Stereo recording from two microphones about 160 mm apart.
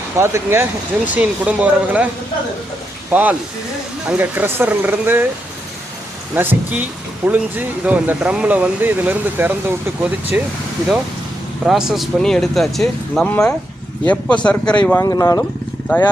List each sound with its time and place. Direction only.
0.2 s speech: 15° right (ahead or behind)
3.1 s speech: 10° right (ahead or behind)
6.3 s speech: 10° right (ahead or behind)
11.6 s speech: 5° right (ahead or behind)
15.0 s speech: 20° left (ahead or behind)